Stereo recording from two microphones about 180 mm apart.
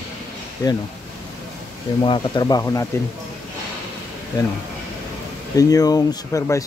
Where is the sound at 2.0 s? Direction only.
25° left (ahead or behind).